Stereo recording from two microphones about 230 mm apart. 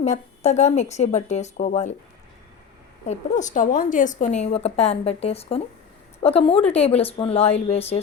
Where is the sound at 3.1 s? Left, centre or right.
Left.